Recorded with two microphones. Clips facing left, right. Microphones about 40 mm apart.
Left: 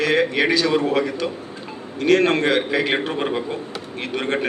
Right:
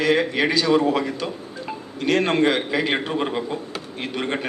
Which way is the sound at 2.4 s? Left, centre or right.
Centre.